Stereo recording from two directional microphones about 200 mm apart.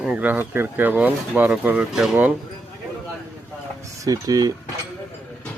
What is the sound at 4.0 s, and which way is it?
Speech, 20° right (ahead or behind).